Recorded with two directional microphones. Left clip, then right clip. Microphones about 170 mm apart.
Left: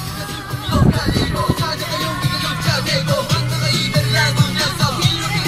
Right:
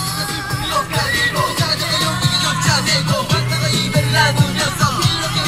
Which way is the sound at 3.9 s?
15° right (ahead or behind).